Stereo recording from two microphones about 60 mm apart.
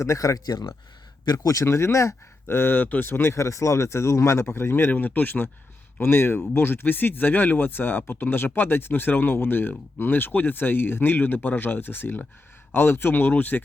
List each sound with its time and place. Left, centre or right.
0.0 s speech: left
1.3 s speech: left
1.6 s speech: left